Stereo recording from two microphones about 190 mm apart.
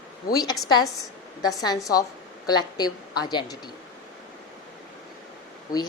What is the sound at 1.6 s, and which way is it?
A woman's voice, 20° left (ahead or behind).